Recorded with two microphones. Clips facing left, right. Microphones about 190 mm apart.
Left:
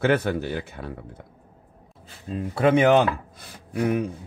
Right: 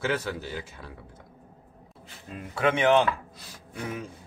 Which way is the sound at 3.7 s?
65° left (ahead or behind).